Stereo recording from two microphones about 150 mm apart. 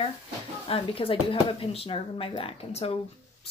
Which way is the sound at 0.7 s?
35° left (ahead or behind).